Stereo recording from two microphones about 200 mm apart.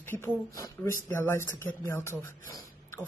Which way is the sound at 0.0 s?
10° left (ahead or behind).